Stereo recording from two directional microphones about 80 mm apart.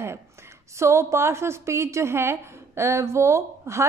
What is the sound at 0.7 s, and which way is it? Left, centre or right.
A woman's voice, right.